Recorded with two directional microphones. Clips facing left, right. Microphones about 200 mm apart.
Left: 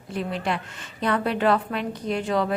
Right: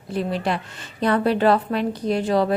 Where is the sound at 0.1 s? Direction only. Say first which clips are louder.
Right 4 dB; 35° right (ahead or behind).